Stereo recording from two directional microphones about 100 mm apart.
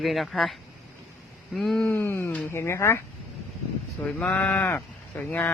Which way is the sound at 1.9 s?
25° left (ahead or behind).